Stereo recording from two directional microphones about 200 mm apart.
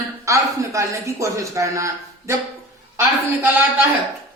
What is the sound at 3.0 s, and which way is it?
Speech, 10° right (ahead or behind).